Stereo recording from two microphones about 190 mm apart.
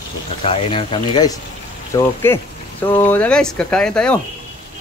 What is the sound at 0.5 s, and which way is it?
Speech, 25° left (ahead or behind).